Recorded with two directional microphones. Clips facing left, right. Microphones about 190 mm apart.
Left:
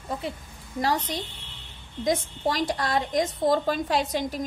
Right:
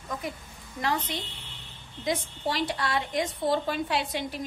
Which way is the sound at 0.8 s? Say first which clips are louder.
Left 3 dB; 40° left (ahead or behind).